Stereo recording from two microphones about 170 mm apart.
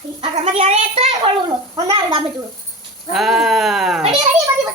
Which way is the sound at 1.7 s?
25° right (ahead or behind).